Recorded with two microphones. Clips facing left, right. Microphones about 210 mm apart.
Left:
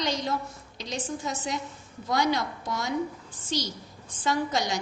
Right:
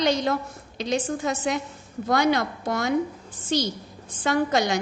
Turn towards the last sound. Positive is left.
turn(degrees=-60)  # may be behind; listen again after turning